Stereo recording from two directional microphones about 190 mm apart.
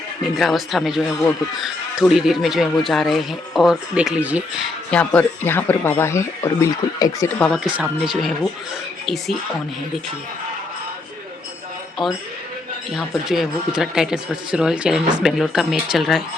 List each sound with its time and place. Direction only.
0.3 s speech: centre (ahead or behind)
4.9 s speech: 5° left (ahead or behind)
7.6 s speech: 5° right (ahead or behind)
12.0 s speech: centre (ahead or behind)
13.2 s speech: centre (ahead or behind)